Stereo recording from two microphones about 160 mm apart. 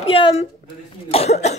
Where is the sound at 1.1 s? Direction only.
40° left (ahead or behind).